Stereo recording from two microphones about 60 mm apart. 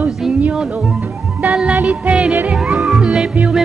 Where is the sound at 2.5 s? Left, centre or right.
Centre.